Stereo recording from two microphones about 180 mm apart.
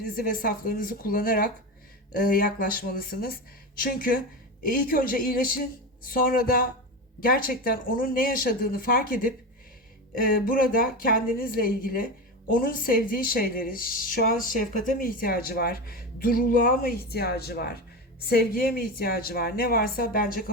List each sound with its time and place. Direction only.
0.2 s a woman's voice: 50° left (ahead or behind)